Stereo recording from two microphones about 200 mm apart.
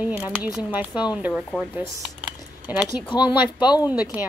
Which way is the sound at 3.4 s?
20° left (ahead or behind).